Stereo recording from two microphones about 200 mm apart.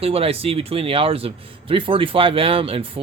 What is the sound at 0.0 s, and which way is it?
Speech, 30° right (ahead or behind).